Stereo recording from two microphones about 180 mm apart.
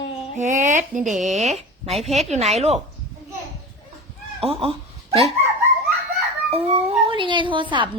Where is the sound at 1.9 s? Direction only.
Centre (ahead or behind).